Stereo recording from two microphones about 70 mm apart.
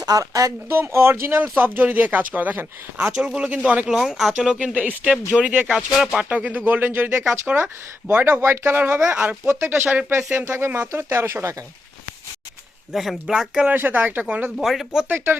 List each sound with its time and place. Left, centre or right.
0.0 s speech: right
0.7 s speech: right
1.4 s speech: right
3.0 s speech: centre
3.9 s speech: centre
5.6 s speech: centre
6.2 s speech: right
12.9 s speech: centre
13.7 s speech: right
14.6 s speech: centre
15.1 s speech: right